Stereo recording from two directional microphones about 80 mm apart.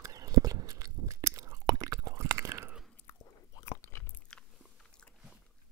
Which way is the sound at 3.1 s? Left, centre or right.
Left.